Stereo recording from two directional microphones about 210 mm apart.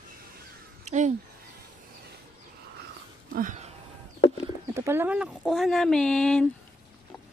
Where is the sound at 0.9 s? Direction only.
35° right (ahead or behind).